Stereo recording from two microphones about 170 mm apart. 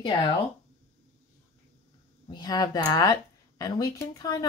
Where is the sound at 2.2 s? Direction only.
25° left (ahead or behind).